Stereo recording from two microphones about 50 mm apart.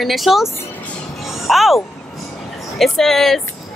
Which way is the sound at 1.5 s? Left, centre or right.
Centre.